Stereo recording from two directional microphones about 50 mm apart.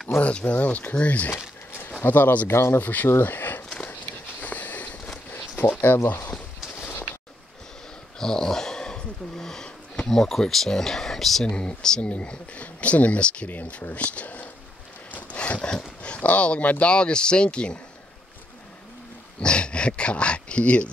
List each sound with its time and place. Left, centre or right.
0.2 s speech: left
2.5 s speech: left
2.8 s speech: left
3.1 s a sound: left
4.4 s a sound: left
8.2 s speech: centre
11.4 s speech: centre
12.1 s speech: left
15.3 s a sound: left
16.0 s speech: left
19.4 s speech: left